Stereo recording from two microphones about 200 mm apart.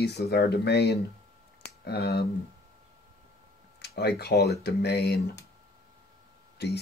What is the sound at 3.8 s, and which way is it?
Speech, 55° left (ahead or behind).